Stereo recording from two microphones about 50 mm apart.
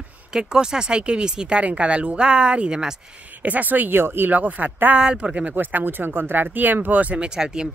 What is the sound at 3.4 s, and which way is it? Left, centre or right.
Speech, right.